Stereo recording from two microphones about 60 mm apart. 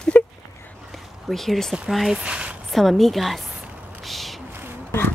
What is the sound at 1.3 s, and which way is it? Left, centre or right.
Speech, centre.